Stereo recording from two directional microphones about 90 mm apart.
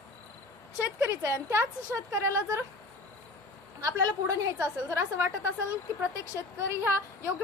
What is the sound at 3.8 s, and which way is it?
Speech, 40° right (ahead or behind).